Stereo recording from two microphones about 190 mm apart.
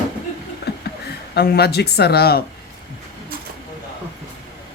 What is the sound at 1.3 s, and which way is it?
Speech, 55° left (ahead or behind).